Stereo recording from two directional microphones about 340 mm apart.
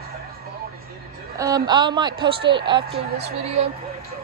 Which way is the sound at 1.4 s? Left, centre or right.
Centre.